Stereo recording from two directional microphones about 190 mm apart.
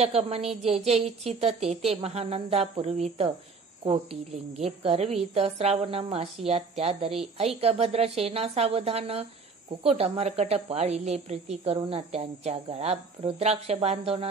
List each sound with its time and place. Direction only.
0.0 s a woman's voice: 30° right (ahead or behind)